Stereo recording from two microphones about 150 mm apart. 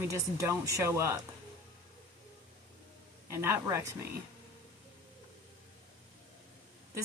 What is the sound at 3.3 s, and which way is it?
Speech, 15° right (ahead or behind).